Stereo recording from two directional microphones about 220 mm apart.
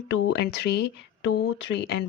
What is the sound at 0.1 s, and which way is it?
Speech, 50° left (ahead or behind).